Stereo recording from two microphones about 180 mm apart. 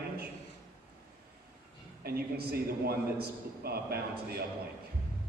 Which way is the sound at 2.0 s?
60° right (ahead or behind).